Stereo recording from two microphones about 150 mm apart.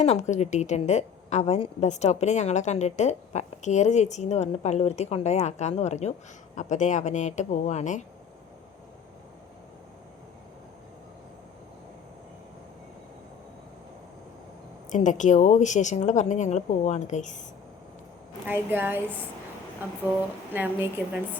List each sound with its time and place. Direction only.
0.0 s a woman's voice: 50° left (ahead or behind)
14.8 s a woman's voice: 55° left (ahead or behind)
18.4 s a woman's voice: 15° right (ahead or behind)
20.5 s a woman's voice: 15° right (ahead or behind)